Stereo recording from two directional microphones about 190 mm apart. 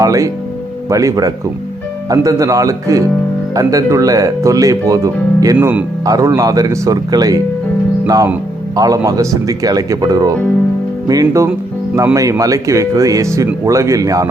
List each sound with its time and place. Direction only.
0.0 s speech: 15° right (ahead or behind)
5.5 s speech: 5° right (ahead or behind)
6.1 s speech: 20° right (ahead or behind)